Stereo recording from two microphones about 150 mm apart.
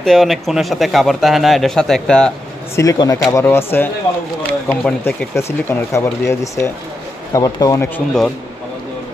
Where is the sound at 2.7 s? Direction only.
20° left (ahead or behind).